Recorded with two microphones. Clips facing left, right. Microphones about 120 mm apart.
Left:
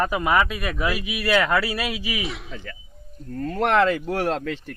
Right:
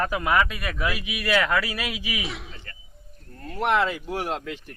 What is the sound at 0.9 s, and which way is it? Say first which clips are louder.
A man's voice: left 3 dB; 20° right (ahead or behind).